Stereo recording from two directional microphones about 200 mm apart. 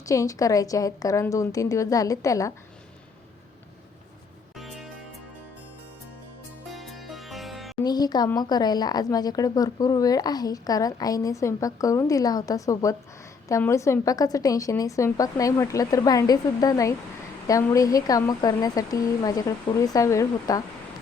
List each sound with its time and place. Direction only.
0.0 s a woman's voice: 15° left (ahead or behind)
4.5 s music: centre (ahead or behind)
6.7 s music: centre (ahead or behind)
7.9 s a woman's voice: 20° left (ahead or behind)